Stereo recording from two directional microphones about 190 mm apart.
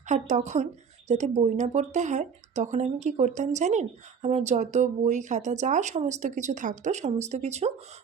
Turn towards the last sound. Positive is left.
turn(degrees=-35)  # may be behind; listen again after turning